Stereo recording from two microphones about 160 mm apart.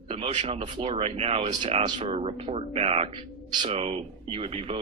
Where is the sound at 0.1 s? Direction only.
45° right (ahead or behind).